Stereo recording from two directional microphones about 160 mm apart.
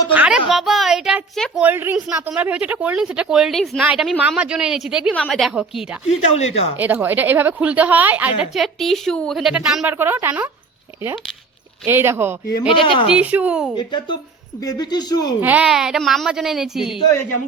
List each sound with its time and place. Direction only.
0.1 s a woman's voice: 10° right (ahead or behind)
6.1 s speech: 40° left (ahead or behind)
6.7 s a woman's voice: 10° right (ahead or behind)
11.9 s a woman's voice: 15° right (ahead or behind)
12.6 s speech: 35° left (ahead or behind)
13.1 s a woman's voice: 10° right (ahead or behind)
13.7 s speech: 30° left (ahead or behind)
15.4 s a woman's voice: 10° right (ahead or behind)